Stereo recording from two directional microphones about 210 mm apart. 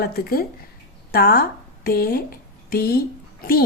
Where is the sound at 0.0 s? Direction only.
45° left (ahead or behind).